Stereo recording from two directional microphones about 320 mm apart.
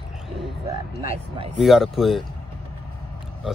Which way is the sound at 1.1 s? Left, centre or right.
Centre.